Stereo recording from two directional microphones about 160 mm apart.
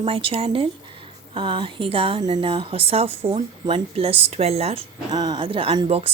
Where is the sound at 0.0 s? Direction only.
35° right (ahead or behind).